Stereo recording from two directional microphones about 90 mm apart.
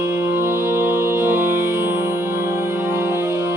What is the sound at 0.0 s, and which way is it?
Music, 30° right (ahead or behind).